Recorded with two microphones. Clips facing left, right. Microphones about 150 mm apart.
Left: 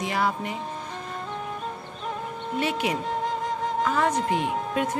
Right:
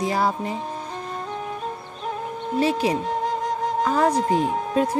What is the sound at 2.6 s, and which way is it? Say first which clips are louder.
A woman's voice: right 5 dB; 35° right (ahead or behind).